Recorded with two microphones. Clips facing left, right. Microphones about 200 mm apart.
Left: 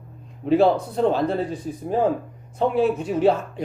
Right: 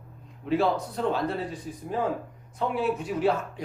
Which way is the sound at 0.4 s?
25° left (ahead or behind).